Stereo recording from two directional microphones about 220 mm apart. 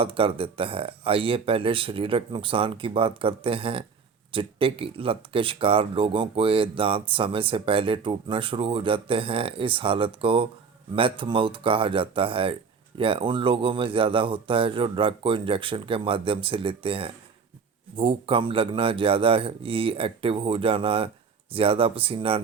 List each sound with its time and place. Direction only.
0.0 s speech: 25° right (ahead or behind)